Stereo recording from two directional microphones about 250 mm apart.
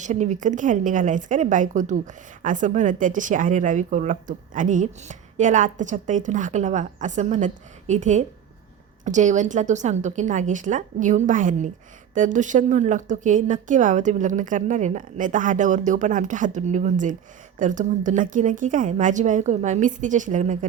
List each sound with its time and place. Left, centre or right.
0.0 s a woman's voice: right